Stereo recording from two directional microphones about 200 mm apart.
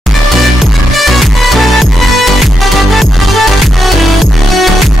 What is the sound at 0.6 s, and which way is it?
Music, centre (ahead or behind).